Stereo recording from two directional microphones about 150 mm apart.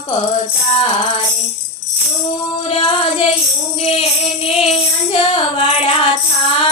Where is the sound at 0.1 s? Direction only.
35° left (ahead or behind).